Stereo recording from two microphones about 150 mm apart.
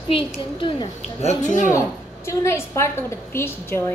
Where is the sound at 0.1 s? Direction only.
35° left (ahead or behind).